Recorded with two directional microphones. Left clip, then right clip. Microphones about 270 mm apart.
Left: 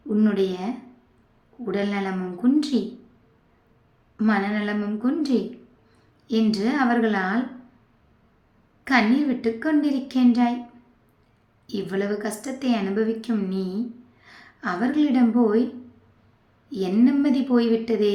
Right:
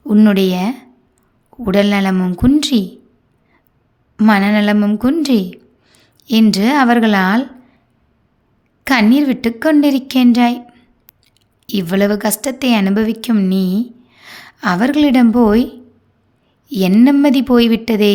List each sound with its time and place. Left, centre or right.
0.1 s a woman's voice: right
4.2 s a woman's voice: right
8.8 s a woman's voice: right
11.6 s a woman's voice: right
16.6 s a woman's voice: right